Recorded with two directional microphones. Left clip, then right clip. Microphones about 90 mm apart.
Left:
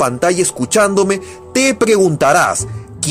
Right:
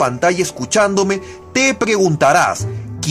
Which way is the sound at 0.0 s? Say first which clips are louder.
Left 1 dB; 40° left (ahead or behind).